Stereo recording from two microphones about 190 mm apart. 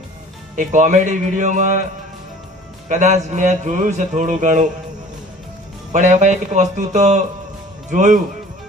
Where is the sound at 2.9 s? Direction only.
40° right (ahead or behind).